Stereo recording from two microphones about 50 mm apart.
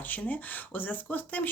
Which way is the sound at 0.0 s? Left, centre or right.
Left.